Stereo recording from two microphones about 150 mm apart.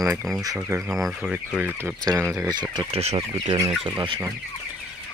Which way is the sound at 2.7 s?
40° right (ahead or behind).